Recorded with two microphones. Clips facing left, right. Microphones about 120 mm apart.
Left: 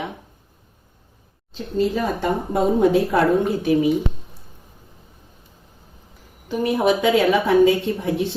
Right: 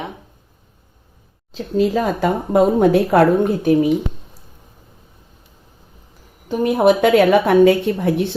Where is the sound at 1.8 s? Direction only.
90° right.